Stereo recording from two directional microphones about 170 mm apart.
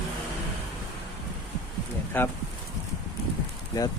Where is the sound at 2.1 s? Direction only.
10° left (ahead or behind).